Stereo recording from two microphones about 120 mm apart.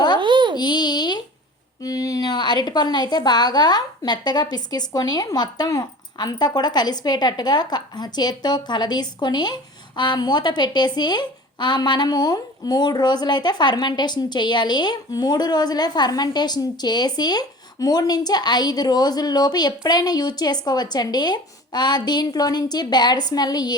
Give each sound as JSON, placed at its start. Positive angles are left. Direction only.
{"t": 0.2, "sound": "babbling", "side_deg": -40}
{"t": 0.5, "sound": "a sound", "side_deg": 35}
{"t": 1.8, "sound": "a woman's voice", "side_deg": 30}